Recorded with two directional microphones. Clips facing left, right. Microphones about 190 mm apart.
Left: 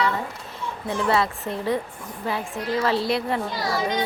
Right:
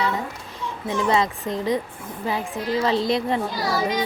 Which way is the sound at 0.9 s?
15° right (ahead or behind).